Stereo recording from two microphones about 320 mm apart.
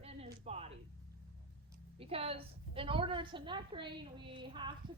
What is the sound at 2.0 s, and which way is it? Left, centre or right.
A woman's voice, centre.